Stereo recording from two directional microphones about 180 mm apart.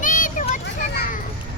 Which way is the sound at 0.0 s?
45° left (ahead or behind).